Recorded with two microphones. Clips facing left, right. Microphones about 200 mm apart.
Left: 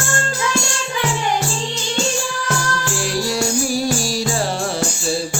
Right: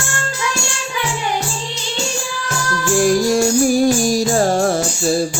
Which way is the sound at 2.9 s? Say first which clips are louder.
Right 10 dB; 50° right (ahead or behind).